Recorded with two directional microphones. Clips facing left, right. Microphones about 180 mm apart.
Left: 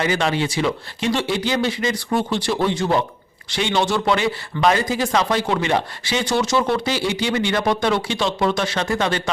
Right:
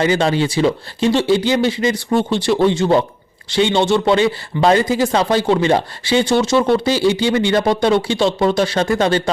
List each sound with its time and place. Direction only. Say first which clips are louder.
0.0 s speech: right 5 dB; 30° right (ahead or behind)